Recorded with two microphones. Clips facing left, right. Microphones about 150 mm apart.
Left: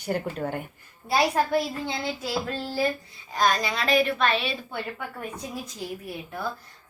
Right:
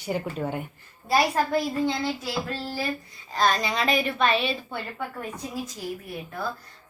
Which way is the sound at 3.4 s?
5° left (ahead or behind).